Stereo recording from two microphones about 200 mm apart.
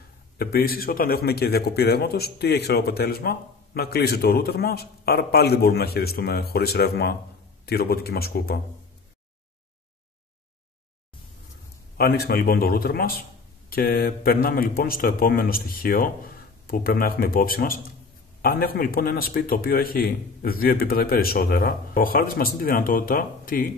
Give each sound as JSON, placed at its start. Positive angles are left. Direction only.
{"t": 0.4, "sound": "speech", "side_deg": 50}
{"t": 12.0, "sound": "speech", "side_deg": 50}